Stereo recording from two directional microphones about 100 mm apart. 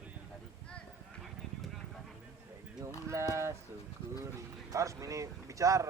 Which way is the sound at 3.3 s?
30° right (ahead or behind).